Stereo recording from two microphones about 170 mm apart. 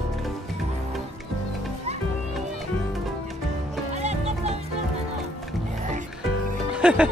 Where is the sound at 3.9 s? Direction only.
40° right (ahead or behind).